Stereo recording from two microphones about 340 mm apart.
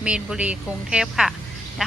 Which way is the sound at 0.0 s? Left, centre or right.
Centre.